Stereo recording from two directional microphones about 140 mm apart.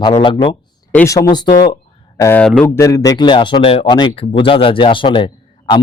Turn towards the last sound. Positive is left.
turn(degrees=35)  # may be behind; listen again after turning